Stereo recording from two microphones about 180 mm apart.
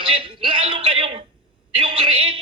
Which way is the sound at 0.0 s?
30° right (ahead or behind).